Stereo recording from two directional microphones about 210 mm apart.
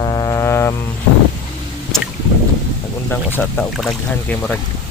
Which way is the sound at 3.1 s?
10° left (ahead or behind).